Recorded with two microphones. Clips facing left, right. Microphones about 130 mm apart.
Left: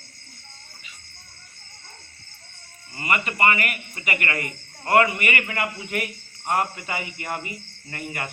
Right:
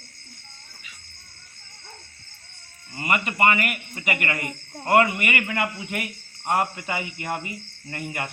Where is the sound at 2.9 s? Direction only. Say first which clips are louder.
Right 1 dB; 15° right (ahead or behind).